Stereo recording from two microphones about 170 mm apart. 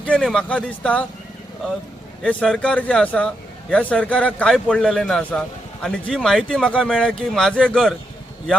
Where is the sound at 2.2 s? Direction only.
5° left (ahead or behind).